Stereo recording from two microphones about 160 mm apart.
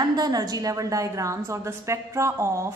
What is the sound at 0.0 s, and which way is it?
A woman's voice, 25° right (ahead or behind).